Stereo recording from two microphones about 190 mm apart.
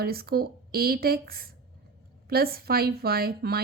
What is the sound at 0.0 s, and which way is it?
Speech, 55° right (ahead or behind).